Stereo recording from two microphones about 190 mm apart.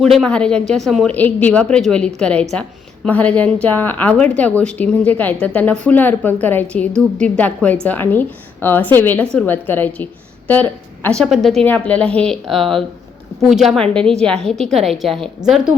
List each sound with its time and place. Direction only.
0.0 s a woman's voice: centre (ahead or behind)